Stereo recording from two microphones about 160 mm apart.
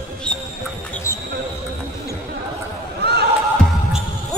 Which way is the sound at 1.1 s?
15° left (ahead or behind).